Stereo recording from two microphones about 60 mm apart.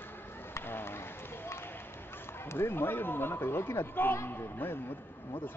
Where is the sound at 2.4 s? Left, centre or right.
Left.